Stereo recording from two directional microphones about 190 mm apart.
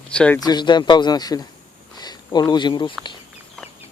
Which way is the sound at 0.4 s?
25° left (ahead or behind).